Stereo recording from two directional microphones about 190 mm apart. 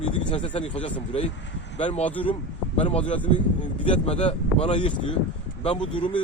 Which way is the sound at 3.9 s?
35° left (ahead or behind).